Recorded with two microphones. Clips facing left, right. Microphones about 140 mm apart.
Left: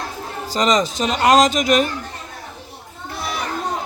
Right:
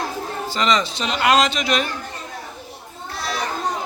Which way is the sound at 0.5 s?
40° left (ahead or behind).